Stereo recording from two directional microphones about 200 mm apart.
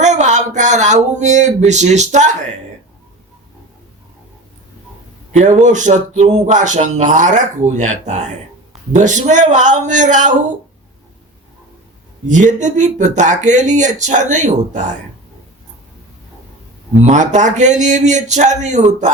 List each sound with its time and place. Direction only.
0.0 s speech: 35° right (ahead or behind)
5.4 s speech: 40° right (ahead or behind)
12.3 s speech: 40° right (ahead or behind)
17.0 s speech: 35° right (ahead or behind)